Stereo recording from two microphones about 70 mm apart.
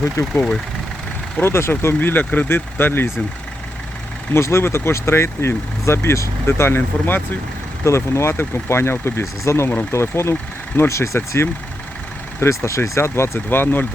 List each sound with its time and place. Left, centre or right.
0.2 s speech: left
1.4 s speech: left
4.3 s speech: left